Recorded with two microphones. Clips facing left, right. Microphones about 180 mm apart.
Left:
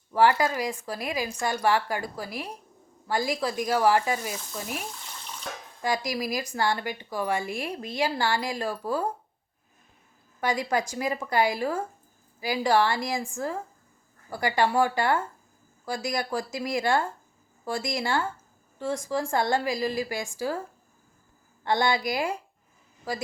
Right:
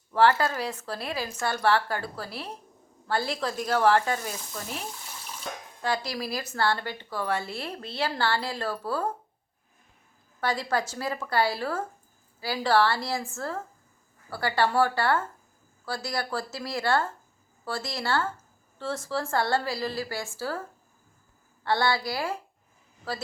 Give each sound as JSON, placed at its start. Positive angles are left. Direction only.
{"t": 0.1, "sound": "a woman's voice", "side_deg": 10}
{"t": 4.9, "sound": "water tap", "side_deg": -5}
{"t": 5.8, "sound": "a woman's voice", "side_deg": 15}
{"t": 10.4, "sound": "a woman's voice", "side_deg": 15}
{"t": 21.6, "sound": "a woman's voice", "side_deg": 15}